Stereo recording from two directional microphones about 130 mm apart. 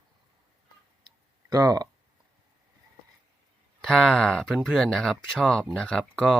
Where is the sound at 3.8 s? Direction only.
Centre (ahead or behind).